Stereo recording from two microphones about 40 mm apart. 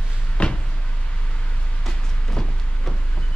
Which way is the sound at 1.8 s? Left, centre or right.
Centre.